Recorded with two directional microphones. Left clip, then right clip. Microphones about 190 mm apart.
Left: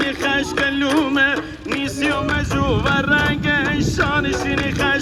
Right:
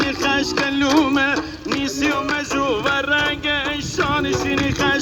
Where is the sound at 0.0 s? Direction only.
35° right (ahead or behind).